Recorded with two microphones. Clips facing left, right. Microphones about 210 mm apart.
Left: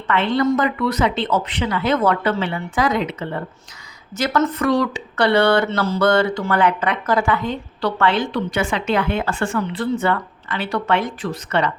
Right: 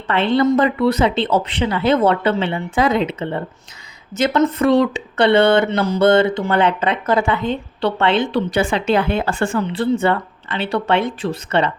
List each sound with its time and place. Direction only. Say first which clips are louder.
0.1 s speech: right 3 dB; 30° right (ahead or behind)